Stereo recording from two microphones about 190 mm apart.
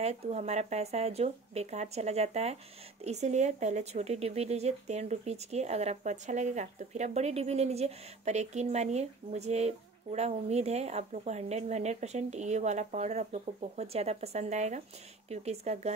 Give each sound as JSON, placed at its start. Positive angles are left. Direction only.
{"t": 0.0, "sound": "speech", "side_deg": -35}